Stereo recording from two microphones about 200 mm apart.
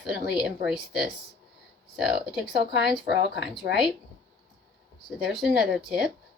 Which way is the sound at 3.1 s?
60° left (ahead or behind).